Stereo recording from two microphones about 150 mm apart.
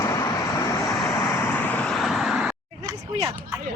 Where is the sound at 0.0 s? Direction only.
20° left (ahead or behind); by 2.6 s 5° right (ahead or behind).